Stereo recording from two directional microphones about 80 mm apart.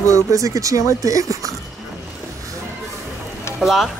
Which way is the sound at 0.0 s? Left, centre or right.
Right.